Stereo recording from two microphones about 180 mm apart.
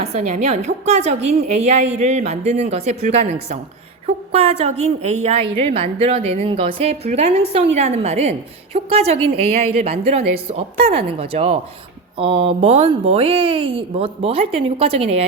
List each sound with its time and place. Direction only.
0.0 s a woman's voice: 40° right (ahead or behind)